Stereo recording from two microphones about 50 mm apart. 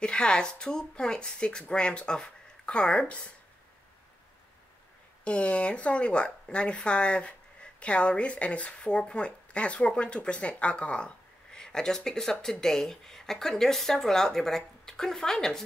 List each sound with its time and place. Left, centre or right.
0.0 s speech: centre
3.1 s speech: left
5.2 s speech: left